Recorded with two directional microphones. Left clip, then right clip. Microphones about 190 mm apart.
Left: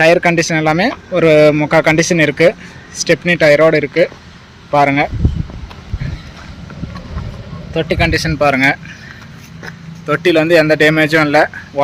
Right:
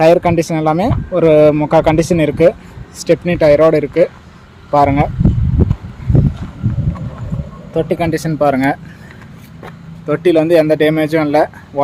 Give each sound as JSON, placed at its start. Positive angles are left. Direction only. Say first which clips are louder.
{"t": 0.0, "sound": "speech", "louder": "even", "side_deg": 0}
{"t": 7.7, "sound": "speech", "louder": "left 1 dB", "side_deg": -15}
{"t": 9.6, "sound": "speech", "louder": "left 1 dB", "side_deg": -15}